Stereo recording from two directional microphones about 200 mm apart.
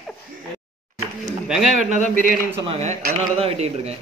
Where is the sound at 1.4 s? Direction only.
5° right (ahead or behind).